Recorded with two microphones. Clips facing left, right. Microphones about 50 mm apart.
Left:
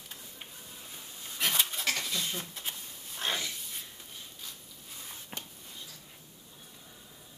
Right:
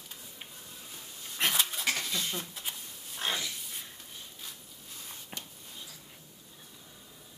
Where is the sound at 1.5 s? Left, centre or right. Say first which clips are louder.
Even; centre.